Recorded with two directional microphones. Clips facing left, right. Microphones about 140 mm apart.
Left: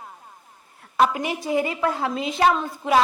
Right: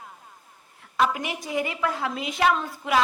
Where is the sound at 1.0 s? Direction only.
30° left (ahead or behind).